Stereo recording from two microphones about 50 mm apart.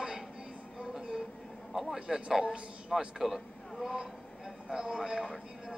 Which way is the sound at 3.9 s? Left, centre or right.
Centre.